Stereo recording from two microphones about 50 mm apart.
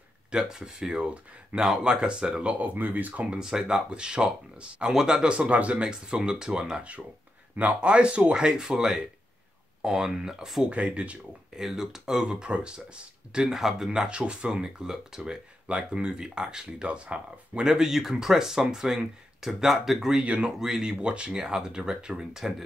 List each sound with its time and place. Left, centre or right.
0.4 s speech: centre
2.6 s speech: right
3.3 s speech: centre
10.7 s speech: right
11.5 s speech: centre
13.5 s speech: centre
17.6 s speech: centre